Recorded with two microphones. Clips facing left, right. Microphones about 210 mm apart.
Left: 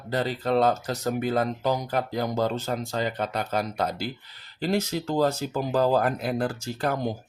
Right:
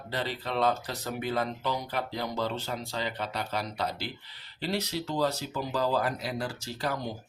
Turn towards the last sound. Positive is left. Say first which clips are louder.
# left 6 dB
turn(degrees=50)  # may be behind; listen again after turning